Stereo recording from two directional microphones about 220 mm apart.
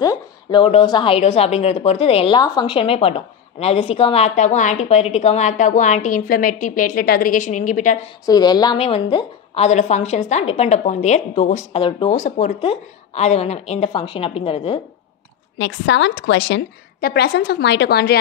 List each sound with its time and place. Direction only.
0.0 s a woman's voice: 20° left (ahead or behind); by 8.0 s 35° left (ahead or behind)
8.3 s a woman's voice: 20° left (ahead or behind)
15.5 s a woman's voice: 55° left (ahead or behind)